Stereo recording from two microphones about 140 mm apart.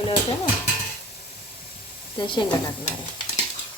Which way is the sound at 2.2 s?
35° left (ahead or behind).